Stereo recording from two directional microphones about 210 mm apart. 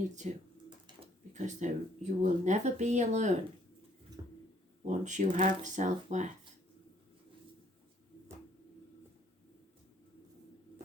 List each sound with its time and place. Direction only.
0.2 s speech: 35° right (ahead or behind)
4.2 s a sound: 20° right (ahead or behind)
4.9 s speech: 35° right (ahead or behind)